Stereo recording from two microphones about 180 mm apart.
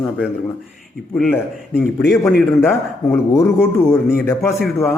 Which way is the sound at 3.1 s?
15° left (ahead or behind).